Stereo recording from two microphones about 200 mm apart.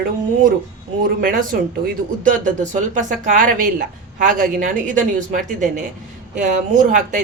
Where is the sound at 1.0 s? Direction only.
45° right (ahead or behind).